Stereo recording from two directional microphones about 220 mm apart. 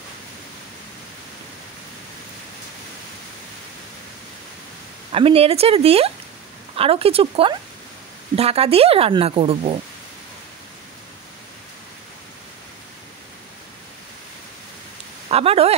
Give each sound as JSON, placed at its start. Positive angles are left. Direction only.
{"t": 5.1, "sound": "speech", "side_deg": -25}
{"t": 15.2, "sound": "speech", "side_deg": -25}